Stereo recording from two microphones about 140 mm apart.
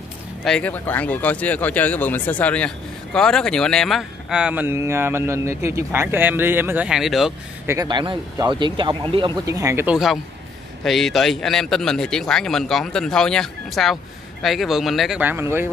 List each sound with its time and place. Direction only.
0.4 s speech: 5° left (ahead or behind)
7.6 s speech: 25° right (ahead or behind)
9.5 s speech: 20° right (ahead or behind)
9.8 s speech: centre (ahead or behind)
15.2 s speech: 15° right (ahead or behind)